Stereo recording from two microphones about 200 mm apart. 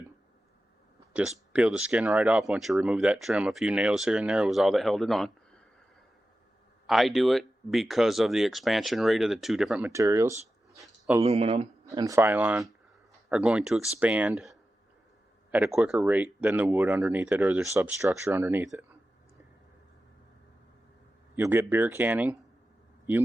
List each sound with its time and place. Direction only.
1.1 s speech: 5° right (ahead or behind)
6.8 s speech: centre (ahead or behind); by 10.3 s 15° right (ahead or behind)
10.8 s a sound: 5° right (ahead or behind)
11.2 s speech: 30° right (ahead or behind)
11.9 s speech: 15° right (ahead or behind)
21.3 s speech: 15° right (ahead or behind)